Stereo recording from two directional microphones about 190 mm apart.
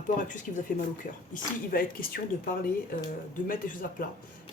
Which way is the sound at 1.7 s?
50° left (ahead or behind).